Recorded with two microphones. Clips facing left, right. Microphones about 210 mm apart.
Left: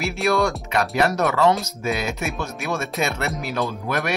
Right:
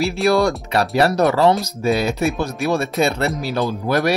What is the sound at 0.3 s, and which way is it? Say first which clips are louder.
Speech: right 3 dB; 35° right (ahead or behind).